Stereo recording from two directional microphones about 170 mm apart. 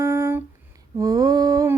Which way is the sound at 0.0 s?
15° right (ahead or behind).